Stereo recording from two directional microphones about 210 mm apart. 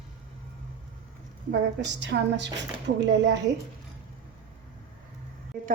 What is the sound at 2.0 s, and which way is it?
A woman's voice, 60° right (ahead or behind).